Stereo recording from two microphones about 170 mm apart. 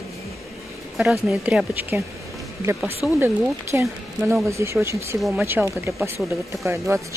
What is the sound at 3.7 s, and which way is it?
Speech, 15° right (ahead or behind).